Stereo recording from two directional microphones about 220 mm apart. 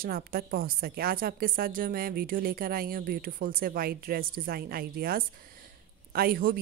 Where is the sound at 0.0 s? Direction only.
45° right (ahead or behind).